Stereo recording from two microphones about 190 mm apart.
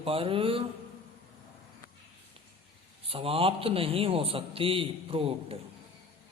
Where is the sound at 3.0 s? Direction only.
30° right (ahead or behind).